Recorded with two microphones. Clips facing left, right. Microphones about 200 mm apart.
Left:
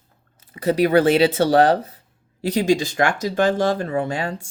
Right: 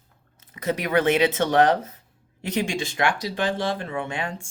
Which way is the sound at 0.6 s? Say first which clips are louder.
Left 7 dB; 30° left (ahead or behind).